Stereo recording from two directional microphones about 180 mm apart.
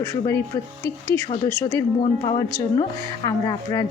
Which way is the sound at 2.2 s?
25° left (ahead or behind).